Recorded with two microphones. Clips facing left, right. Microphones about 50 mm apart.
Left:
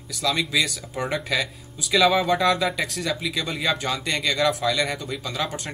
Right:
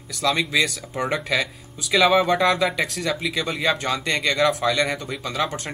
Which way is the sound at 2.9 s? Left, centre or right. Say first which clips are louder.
Right 2 dB; centre.